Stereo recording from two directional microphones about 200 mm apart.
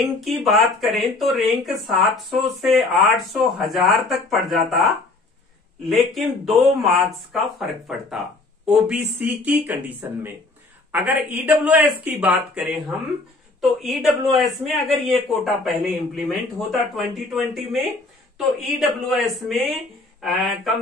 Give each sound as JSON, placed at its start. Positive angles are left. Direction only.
{"t": 0.0, "sound": "a man's voice", "side_deg": 0}
{"t": 5.9, "sound": "a man's voice", "side_deg": 0}